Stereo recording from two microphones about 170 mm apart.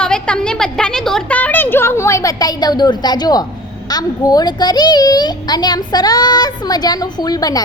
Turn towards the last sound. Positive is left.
turn(degrees=20)  # may be behind; listen again after turning